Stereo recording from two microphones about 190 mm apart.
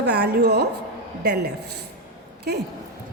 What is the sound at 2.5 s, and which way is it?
Speech, 55° right (ahead or behind).